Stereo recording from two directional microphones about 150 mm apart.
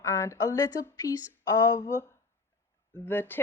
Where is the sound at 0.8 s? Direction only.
20° left (ahead or behind).